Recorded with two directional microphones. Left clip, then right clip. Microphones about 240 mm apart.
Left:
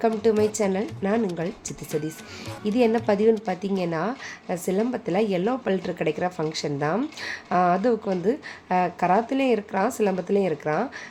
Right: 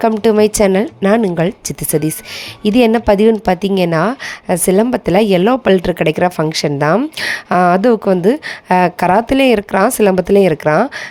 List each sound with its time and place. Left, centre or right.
0.0 s a woman's voice: right